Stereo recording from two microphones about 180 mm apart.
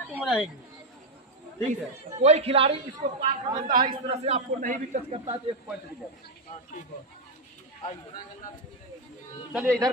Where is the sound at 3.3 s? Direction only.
45° right (ahead or behind).